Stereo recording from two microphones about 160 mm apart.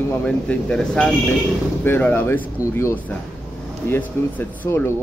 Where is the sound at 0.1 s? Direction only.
5° left (ahead or behind).